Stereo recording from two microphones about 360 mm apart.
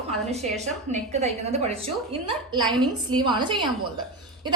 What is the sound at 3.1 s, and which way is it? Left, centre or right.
Speech, centre.